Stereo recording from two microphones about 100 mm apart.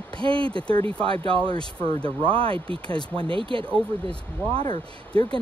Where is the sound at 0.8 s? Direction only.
65° right (ahead or behind).